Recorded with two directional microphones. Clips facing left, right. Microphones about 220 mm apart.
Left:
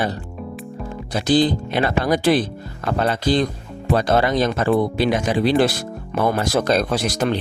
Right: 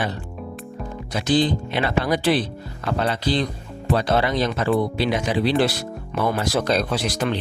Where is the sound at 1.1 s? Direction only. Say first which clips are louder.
Left 3 dB; 35° left (ahead or behind).